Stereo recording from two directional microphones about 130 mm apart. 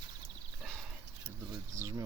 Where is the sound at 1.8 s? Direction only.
25° right (ahead or behind).